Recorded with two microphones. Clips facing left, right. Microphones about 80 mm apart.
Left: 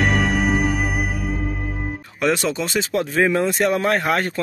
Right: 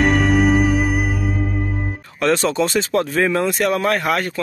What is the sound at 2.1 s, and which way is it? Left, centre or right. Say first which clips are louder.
Speech: right 3 dB; centre.